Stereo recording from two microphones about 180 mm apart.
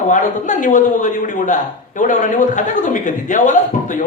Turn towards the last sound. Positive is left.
turn(degrees=45)  # may be behind; listen again after turning